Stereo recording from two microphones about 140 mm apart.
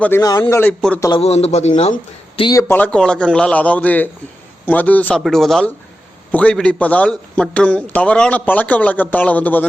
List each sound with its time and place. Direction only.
0.2 s speech: 25° left (ahead or behind)
0.4 s a man's voice: 15° left (ahead or behind)
1.2 s a man's voice: 50° left (ahead or behind)
2.4 s speech: 30° left (ahead or behind)
2.6 s a man's voice: 10° left (ahead or behind)